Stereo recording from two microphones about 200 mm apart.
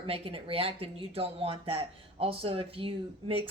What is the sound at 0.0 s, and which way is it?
A woman's voice, 30° right (ahead or behind).